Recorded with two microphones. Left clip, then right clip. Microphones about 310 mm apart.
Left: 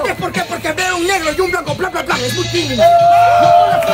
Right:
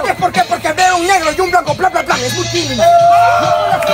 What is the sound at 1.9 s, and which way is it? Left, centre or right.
Music, centre.